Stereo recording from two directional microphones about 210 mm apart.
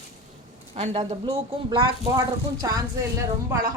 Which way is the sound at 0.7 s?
30° right (ahead or behind).